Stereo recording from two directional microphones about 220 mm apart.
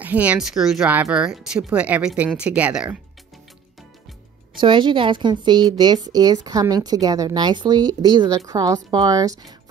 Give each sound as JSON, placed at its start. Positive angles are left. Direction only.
{"t": 0.0, "sound": "speech", "side_deg": -5}
{"t": 4.6, "sound": "a woman's voice", "side_deg": -20}